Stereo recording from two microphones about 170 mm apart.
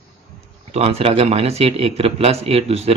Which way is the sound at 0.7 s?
35° right (ahead or behind).